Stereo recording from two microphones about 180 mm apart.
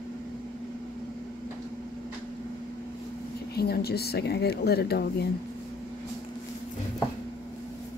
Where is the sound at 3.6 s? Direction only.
60° left (ahead or behind).